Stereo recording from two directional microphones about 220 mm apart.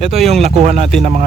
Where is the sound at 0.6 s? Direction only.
30° right (ahead or behind).